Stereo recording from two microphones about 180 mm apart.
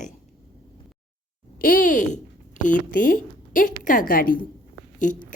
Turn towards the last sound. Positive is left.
turn(degrees=45)  # may be behind; listen again after turning